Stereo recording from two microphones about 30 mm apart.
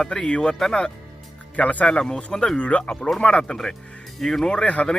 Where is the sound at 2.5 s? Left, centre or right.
Left.